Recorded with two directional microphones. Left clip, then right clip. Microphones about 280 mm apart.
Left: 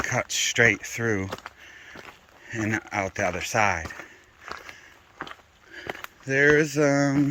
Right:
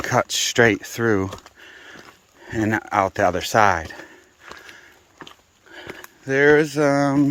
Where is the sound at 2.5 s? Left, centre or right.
Centre.